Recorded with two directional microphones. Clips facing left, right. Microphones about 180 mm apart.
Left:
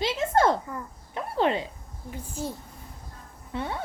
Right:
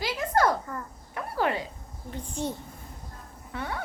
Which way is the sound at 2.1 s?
5° left (ahead or behind).